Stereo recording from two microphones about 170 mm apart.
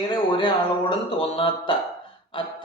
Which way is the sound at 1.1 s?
30° left (ahead or behind).